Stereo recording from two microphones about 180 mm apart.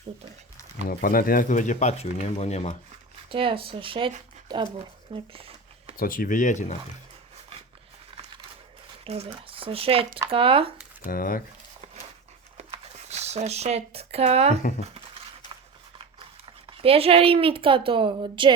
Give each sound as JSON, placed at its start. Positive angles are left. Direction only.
{"t": 0.9, "sound": "speech", "side_deg": 50}
{"t": 3.2, "sound": "speech", "side_deg": -30}
{"t": 5.1, "sound": "a sound", "side_deg": -30}
{"t": 6.0, "sound": "speech", "side_deg": 50}
{"t": 9.0, "sound": "speech", "side_deg": -35}
{"t": 11.0, "sound": "speech", "side_deg": 50}
{"t": 12.5, "sound": "a sound", "side_deg": -35}
{"t": 16.7, "sound": "a woman's voice", "side_deg": -30}